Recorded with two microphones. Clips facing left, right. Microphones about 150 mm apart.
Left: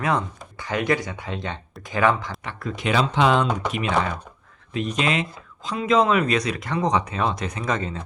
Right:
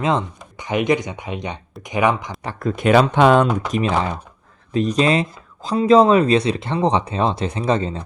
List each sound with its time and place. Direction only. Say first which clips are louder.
0.0 s speech: right 4 dB; 20° right (ahead or behind)
2.4 s speech: right 7 dB; 40° right (ahead or behind)
3.8 s speech: right 4 dB; 30° right (ahead or behind)